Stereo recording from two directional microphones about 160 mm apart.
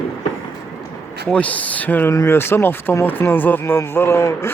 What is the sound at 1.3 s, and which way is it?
Speech, 10° left (ahead or behind).